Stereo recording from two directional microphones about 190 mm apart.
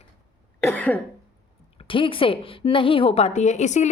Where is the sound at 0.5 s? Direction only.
10° left (ahead or behind).